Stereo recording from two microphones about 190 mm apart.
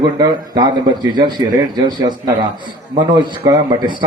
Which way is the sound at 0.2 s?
20° right (ahead or behind).